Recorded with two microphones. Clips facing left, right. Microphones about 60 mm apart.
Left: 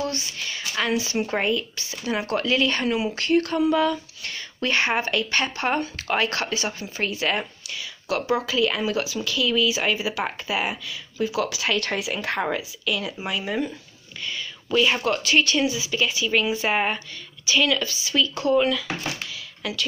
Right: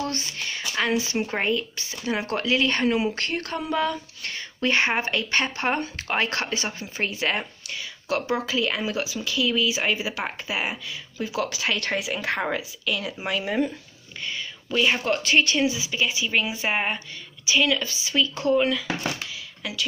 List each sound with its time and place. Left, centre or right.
0.0 s a woman's voice: right
10.9 s speech: right
12.2 s speech: centre
12.5 s speech: right
14.2 s whispering: right
15.0 s a woman's voice: right
19.3 s a sound: centre